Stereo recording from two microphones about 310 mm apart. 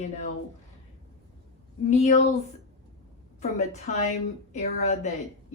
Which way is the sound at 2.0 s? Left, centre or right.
Left.